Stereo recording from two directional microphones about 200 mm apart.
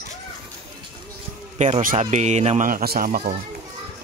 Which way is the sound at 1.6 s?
40° right (ahead or behind).